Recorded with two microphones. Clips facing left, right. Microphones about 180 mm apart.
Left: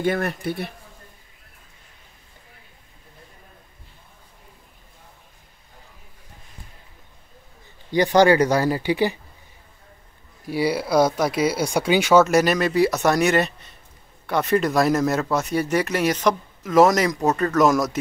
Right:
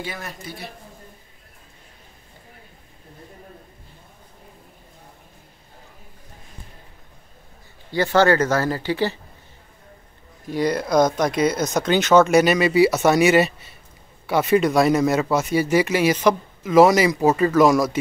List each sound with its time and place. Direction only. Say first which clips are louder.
0.0 s speech: left 10 dB; 60° left (ahead or behind)
7.9 s speech: left 2 dB; 15° left (ahead or behind)
10.4 s speech: even; 10° left (ahead or behind)